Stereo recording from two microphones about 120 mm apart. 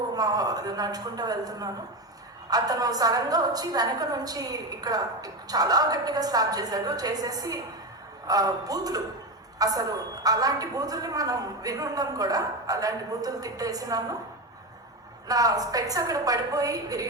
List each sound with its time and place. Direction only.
0.1 s a woman's voice: 30° right (ahead or behind)
15.3 s a woman's voice: 30° right (ahead or behind)